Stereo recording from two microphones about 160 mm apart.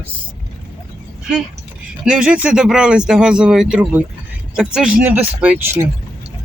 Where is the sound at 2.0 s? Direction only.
5° right (ahead or behind).